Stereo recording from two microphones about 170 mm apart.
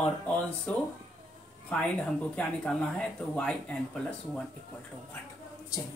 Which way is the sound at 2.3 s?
5° left (ahead or behind).